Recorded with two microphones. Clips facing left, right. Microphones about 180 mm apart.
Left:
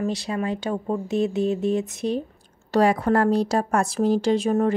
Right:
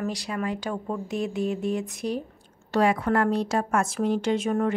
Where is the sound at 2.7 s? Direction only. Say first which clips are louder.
Left 3 dB; 40° left (ahead or behind).